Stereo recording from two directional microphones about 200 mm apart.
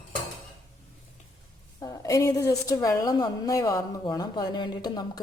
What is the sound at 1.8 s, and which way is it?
A woman's voice, 20° left (ahead or behind).